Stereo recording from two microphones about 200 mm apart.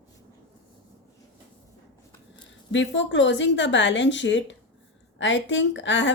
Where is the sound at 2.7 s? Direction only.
65° left (ahead or behind).